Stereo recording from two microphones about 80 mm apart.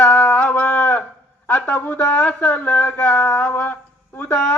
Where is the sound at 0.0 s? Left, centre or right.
Centre.